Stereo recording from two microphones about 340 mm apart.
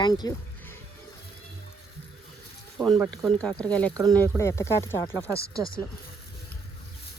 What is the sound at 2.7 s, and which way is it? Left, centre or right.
Speech, centre.